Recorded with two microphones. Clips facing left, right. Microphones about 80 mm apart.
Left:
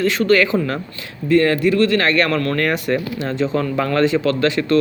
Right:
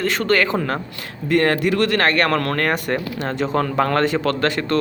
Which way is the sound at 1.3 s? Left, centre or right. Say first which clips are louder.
Left 3 dB; right.